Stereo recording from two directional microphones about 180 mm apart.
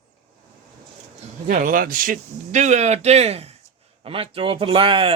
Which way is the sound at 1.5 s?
50° right (ahead or behind).